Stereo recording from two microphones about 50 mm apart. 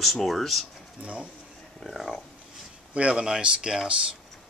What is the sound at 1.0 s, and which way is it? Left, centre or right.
Speech, right.